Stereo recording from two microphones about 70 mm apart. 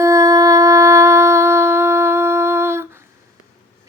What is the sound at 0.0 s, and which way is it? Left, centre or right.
Shofar, right.